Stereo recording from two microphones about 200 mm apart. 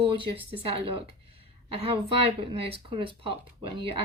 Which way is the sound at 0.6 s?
25° right (ahead or behind).